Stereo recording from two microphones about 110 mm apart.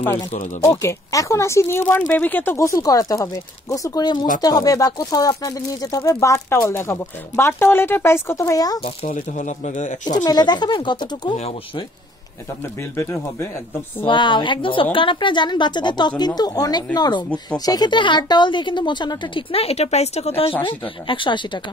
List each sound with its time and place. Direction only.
0.6 s speech: 25° left (ahead or behind)
2.5 s speech: 30° left (ahead or behind)
8.8 s speech: 75° left (ahead or behind); by 9.8 s 90° left
10.2 s speech: 40° left (ahead or behind)
12.9 s speech: 25° left (ahead or behind)
14.0 s a woman's voice: 50° left (ahead or behind)
19.5 s a woman's voice: 65° left (ahead or behind)
21.1 s a woman's voice: 50° left (ahead or behind)